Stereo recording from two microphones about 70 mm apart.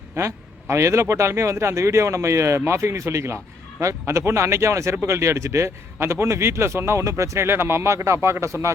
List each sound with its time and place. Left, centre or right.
0.2 s speech: right